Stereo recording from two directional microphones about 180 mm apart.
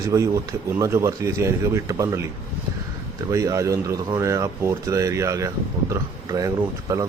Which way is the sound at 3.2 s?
20° right (ahead or behind).